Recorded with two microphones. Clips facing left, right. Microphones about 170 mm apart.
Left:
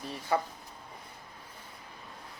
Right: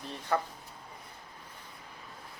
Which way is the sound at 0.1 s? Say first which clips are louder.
Left 1 dB; 10° left (ahead or behind).